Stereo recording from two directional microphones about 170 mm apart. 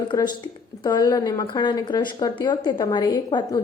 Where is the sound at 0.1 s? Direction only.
25° left (ahead or behind).